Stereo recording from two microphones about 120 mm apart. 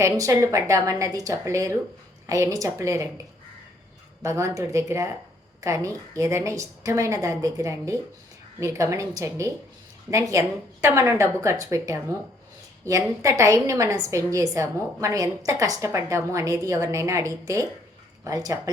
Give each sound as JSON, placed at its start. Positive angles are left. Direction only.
{"t": 0.0, "sound": "a woman's voice", "side_deg": -25}
{"t": 4.2, "sound": "a woman's voice", "side_deg": -25}